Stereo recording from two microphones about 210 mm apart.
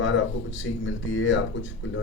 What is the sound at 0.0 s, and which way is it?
Speech, 60° left (ahead or behind).